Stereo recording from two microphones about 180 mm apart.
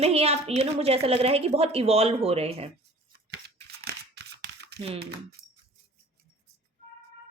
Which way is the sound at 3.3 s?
65° right (ahead or behind).